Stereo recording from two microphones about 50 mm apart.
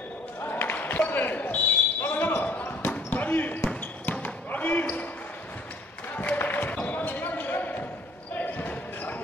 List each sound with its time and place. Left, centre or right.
0.5 s basketball bounce: left
3.1 s basketball bounce: left
6.3 s basketball bounce: left